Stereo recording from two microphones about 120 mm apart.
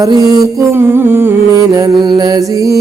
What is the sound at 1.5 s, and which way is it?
Music, 30° right (ahead or behind).